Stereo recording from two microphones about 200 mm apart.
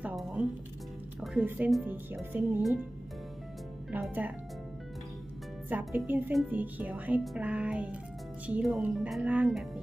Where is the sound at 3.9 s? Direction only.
10° right (ahead or behind).